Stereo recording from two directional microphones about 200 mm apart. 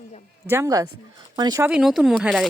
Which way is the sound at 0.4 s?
15° right (ahead or behind).